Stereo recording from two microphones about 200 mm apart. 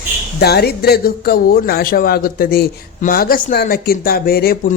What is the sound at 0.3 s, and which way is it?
Speech, 50° left (ahead or behind).